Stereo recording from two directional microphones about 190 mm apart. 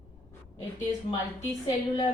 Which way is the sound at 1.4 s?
20° left (ahead or behind).